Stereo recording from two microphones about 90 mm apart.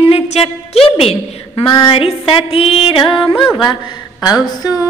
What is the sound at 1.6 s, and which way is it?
Music, 60° left (ahead or behind).